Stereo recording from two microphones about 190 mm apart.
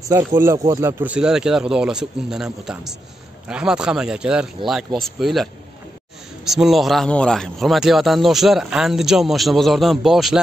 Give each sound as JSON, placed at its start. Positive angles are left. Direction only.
{"t": 0.1, "sound": "speech", "side_deg": -15}
{"t": 6.5, "sound": "speech", "side_deg": 0}